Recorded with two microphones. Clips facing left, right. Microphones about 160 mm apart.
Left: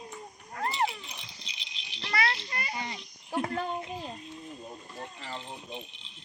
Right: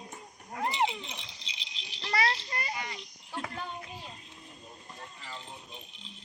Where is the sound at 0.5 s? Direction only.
15° right (ahead or behind); by 2.7 s 35° right (ahead or behind).